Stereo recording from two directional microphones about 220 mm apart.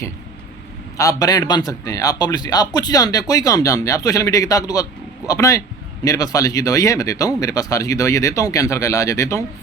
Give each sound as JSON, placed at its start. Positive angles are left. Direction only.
{"t": 0.9, "sound": "a man's voice", "side_deg": 15}